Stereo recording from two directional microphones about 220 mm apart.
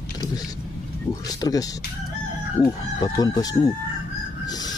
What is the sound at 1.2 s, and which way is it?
Chicken, 15° left (ahead or behind).